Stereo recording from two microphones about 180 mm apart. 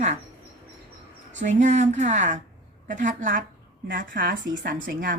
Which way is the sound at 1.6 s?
40° right (ahead or behind).